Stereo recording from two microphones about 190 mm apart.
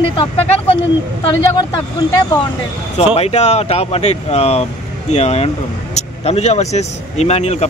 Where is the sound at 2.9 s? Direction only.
30° left (ahead or behind).